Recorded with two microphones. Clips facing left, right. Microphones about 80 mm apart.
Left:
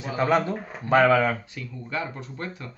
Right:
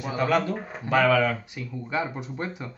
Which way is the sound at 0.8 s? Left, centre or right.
Left.